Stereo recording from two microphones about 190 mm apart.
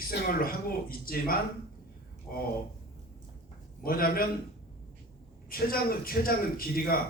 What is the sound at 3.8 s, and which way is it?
Speech, 50° left (ahead or behind).